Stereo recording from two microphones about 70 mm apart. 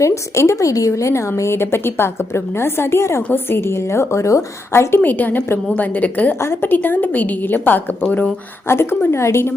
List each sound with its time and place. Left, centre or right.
0.0 s a woman's voice: left
1.4 s a woman's voice: left
5.0 s a woman's voice: left
6.4 s a woman's voice: left
8.6 s a woman's voice: left